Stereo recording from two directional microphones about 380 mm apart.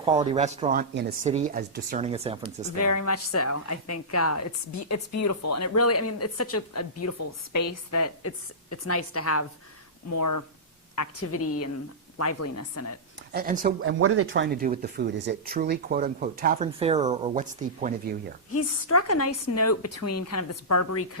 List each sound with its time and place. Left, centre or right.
0.0 s speech: centre
2.7 s a woman's voice: left
10.1 s a woman's voice: left
13.3 s speech: right
14.0 s speech: right; by 18.1 s centre
18.5 s a woman's voice: left